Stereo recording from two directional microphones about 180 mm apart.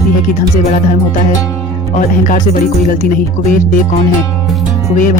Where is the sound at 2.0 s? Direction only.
45° left (ahead or behind).